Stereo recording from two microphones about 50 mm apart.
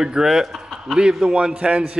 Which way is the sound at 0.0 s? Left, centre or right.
Centre.